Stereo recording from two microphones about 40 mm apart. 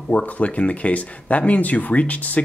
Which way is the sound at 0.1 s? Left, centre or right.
Left.